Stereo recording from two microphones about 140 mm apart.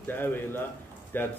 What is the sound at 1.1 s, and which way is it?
Speech, 15° left (ahead or behind).